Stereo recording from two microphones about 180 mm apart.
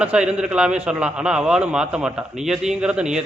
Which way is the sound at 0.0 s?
5° right (ahead or behind).